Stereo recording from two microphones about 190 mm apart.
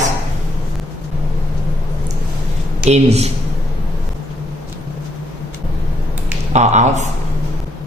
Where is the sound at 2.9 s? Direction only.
35° right (ahead or behind).